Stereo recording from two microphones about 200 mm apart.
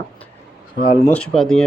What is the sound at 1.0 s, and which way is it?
Speech, 5° left (ahead or behind).